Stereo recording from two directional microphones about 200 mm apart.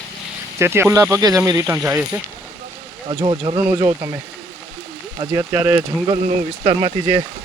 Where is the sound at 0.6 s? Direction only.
10° right (ahead or behind).